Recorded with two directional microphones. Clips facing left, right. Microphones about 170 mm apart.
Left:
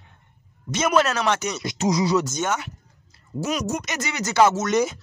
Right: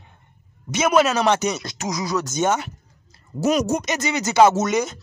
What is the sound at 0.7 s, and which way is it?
Speech, 10° right (ahead or behind).